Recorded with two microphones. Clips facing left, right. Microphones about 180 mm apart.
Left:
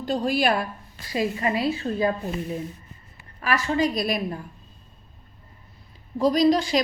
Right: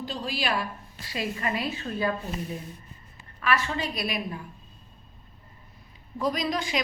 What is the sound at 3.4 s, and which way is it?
Speech, 40° left (ahead or behind).